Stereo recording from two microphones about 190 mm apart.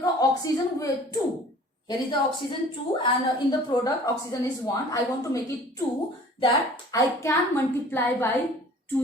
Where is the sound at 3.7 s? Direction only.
20° left (ahead or behind).